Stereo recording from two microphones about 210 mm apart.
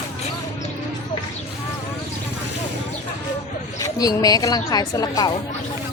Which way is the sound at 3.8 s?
15° left (ahead or behind).